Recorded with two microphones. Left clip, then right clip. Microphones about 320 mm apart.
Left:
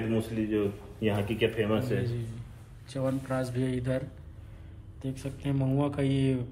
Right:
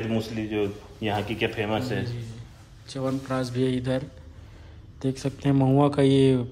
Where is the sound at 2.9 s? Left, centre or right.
Centre.